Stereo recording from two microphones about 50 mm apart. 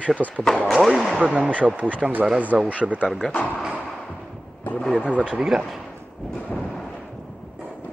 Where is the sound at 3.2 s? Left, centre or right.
Centre.